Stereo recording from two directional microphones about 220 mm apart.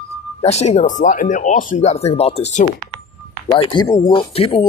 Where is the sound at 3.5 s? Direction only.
20° left (ahead or behind).